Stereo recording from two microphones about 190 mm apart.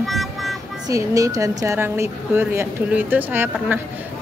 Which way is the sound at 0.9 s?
15° right (ahead or behind).